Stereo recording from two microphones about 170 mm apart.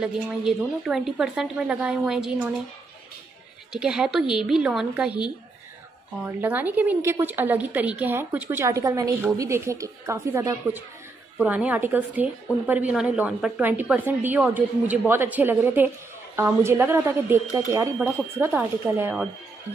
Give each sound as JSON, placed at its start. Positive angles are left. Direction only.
{"t": 0.5, "sound": "a woman's voice", "side_deg": 0}
{"t": 3.7, "sound": "a woman's voice", "side_deg": -5}
{"t": 6.2, "sound": "speech", "side_deg": -10}